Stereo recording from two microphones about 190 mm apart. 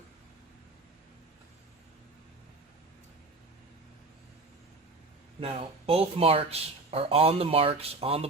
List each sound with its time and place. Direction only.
5.4 s speech: 30° right (ahead or behind)